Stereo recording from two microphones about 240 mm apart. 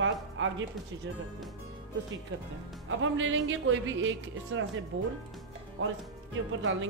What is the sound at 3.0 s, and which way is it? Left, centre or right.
Speech, right.